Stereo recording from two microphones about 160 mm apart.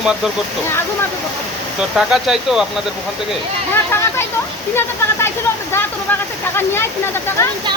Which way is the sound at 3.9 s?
15° left (ahead or behind).